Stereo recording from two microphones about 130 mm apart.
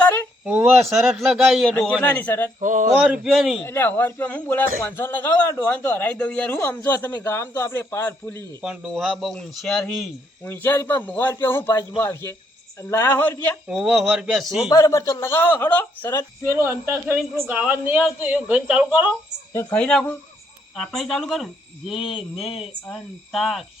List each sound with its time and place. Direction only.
0.4 s speech: 15° right (ahead or behind)
0.9 s speech: centre (ahead or behind)
1.7 s a man's voice: 10° left (ahead or behind)
2.6 s a sound: 80° right
3.0 s speech: 5° right (ahead or behind)
3.6 s a man's voice: 15° left (ahead or behind)
8.6 s speech: 10° right (ahead or behind)
10.4 s a man's voice: 15° left (ahead or behind)
13.7 s speech: 5° right (ahead or behind)
14.7 s speech: 25° left (ahead or behind)
16.6 s speech: 20° right (ahead or behind)
19.7 s a man's voice: 5° left (ahead or behind)